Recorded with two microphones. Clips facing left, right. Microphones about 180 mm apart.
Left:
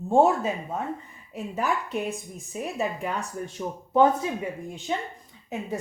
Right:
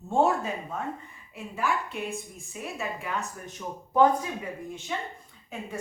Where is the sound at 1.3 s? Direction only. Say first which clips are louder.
Left 3 dB; 40° left (ahead or behind).